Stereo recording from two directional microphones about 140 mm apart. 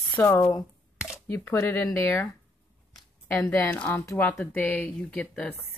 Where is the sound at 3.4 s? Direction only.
15° left (ahead or behind).